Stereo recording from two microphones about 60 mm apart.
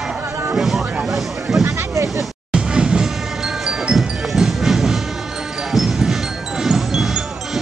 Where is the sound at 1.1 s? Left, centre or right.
Centre.